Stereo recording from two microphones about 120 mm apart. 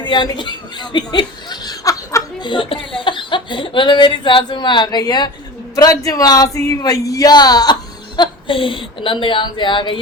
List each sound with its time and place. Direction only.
0.0 s speech: 40° left (ahead or behind)
2.5 s speech: 45° left (ahead or behind)